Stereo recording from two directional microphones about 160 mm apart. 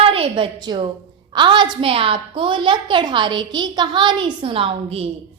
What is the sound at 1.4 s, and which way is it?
A woman's voice, 30° right (ahead or behind).